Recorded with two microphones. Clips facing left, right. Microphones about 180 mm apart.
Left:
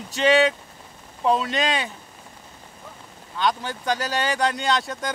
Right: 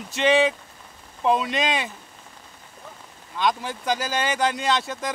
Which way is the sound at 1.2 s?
Centre (ahead or behind).